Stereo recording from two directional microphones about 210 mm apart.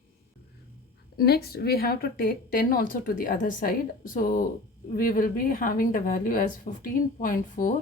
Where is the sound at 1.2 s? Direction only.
50° left (ahead or behind).